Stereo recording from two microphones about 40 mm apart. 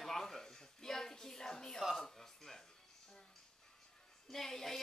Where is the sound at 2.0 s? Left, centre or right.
Centre.